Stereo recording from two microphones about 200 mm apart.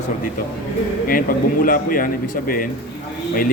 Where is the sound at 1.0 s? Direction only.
45° left (ahead or behind).